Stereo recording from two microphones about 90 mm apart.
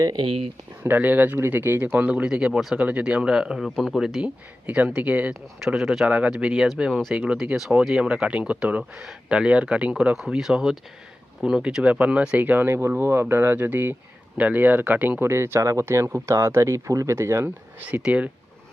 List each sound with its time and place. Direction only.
0.2 s speech: 90° right
0.8 s speech: 20° right (ahead or behind); by 2.7 s centre (ahead or behind)
2.7 s speech: 15° right (ahead or behind)
3.6 s speech: 5° left (ahead or behind)
4.6 s speech: 15° right (ahead or behind)
5.3 s speech: 5° right (ahead or behind)
6.1 s speech: 15° right (ahead or behind)
17.7 s speech: 15° right (ahead or behind)